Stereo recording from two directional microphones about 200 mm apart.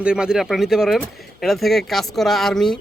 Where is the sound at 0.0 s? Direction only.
5° right (ahead or behind).